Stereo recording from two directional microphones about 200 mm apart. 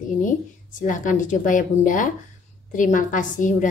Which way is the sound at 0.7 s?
40° left (ahead or behind).